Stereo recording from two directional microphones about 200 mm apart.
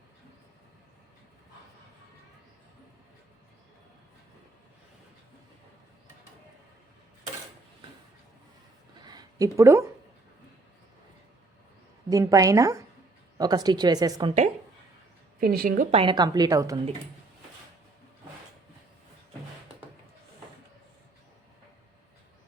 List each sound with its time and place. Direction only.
9.0 s a sound: 20° right (ahead or behind)
9.6 s a woman's voice: 15° right (ahead or behind)
12.0 s a woman's voice: 15° right (ahead or behind)
15.4 s a woman's voice: 45° right (ahead or behind)
15.9 s a woman's voice: 25° right (ahead or behind)